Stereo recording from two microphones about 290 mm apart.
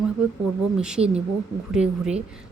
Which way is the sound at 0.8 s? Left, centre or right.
Centre.